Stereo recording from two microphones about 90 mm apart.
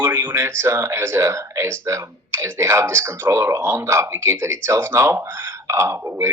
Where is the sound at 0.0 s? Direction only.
20° right (ahead or behind).